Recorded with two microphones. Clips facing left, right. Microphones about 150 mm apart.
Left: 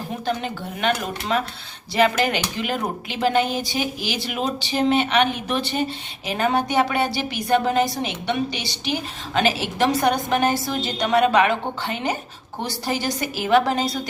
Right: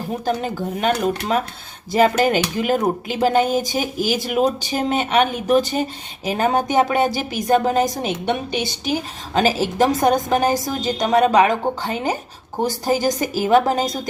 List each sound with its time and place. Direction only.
0.4 s a woman's voice: 40° right (ahead or behind)